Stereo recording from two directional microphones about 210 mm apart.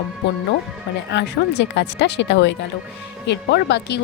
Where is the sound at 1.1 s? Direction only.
60° left (ahead or behind).